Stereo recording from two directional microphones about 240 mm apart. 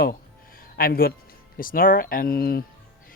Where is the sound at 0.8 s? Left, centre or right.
Left.